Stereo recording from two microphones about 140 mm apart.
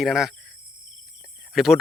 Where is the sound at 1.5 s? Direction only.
Centre (ahead or behind).